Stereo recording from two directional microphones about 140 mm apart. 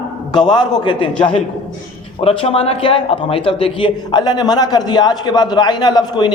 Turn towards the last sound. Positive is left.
turn(degrees=30)  # may be behind; listen again after turning